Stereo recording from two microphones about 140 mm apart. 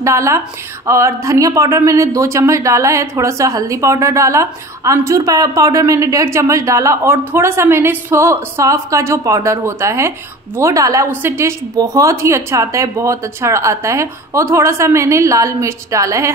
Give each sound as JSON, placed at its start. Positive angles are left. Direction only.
{"t": 0.0, "sound": "speech", "side_deg": -20}